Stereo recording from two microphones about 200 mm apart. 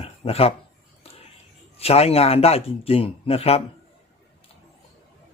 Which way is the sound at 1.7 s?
30° left (ahead or behind).